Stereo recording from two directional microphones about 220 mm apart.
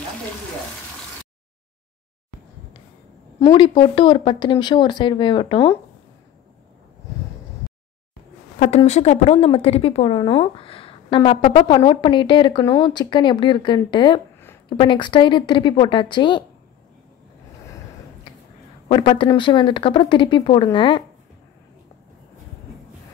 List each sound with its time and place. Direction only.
3.3 s speech: 20° left (ahead or behind)
8.5 s speech: 30° left (ahead or behind)
18.9 s speech: 25° left (ahead or behind)